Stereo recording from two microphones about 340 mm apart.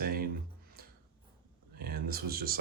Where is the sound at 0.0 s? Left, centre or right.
Right.